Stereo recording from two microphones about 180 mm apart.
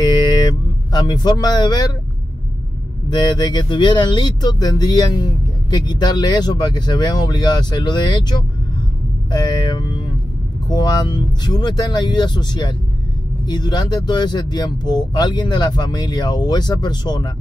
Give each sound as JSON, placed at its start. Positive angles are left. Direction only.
{"t": 0.0, "sound": "vehicle", "side_deg": 25}
{"t": 0.9, "sound": "speech", "side_deg": 25}
{"t": 3.1, "sound": "speech", "side_deg": 25}